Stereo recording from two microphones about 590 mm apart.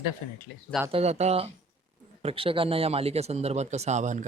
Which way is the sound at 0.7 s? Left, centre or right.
Centre.